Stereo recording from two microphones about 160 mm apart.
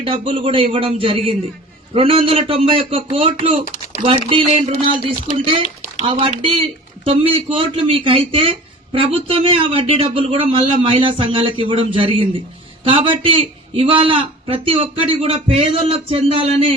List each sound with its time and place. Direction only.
0.0 s speech: 35° right (ahead or behind)
3.6 s typing: 65° left (ahead or behind)
4.0 s speech: 35° right (ahead or behind)